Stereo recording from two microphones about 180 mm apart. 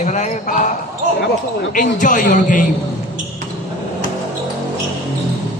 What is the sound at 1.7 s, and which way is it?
Speech, 50° left (ahead or behind).